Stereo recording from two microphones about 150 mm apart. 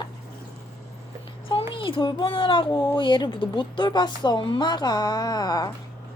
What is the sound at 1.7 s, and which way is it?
A child's voice, 35° left (ahead or behind).